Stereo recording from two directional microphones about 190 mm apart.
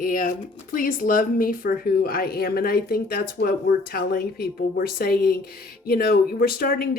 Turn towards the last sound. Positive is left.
turn(degrees=50)  # may be behind; listen again after turning